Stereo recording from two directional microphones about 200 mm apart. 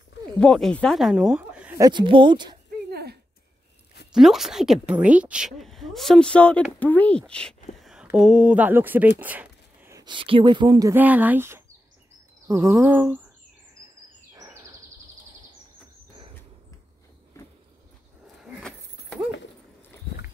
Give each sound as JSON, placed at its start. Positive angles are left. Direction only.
{"t": 0.4, "sound": "speech", "side_deg": 5}
{"t": 1.8, "sound": "speech", "side_deg": -20}
{"t": 2.9, "sound": "a sound", "side_deg": -50}
{"t": 4.1, "sound": "a woman's voice", "side_deg": 0}
{"t": 12.4, "sound": "a sound", "side_deg": -10}
{"t": 13.8, "sound": "bird", "side_deg": -15}
{"t": 14.3, "sound": "bird vocalization", "side_deg": -15}
{"t": 18.2, "sound": "keys jangling", "side_deg": 0}